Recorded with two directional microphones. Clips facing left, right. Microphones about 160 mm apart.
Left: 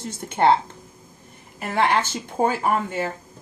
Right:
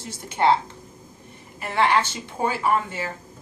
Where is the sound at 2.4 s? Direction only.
50° left (ahead or behind).